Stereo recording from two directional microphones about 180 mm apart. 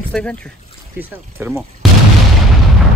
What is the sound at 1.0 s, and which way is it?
Speech, 10° right (ahead or behind).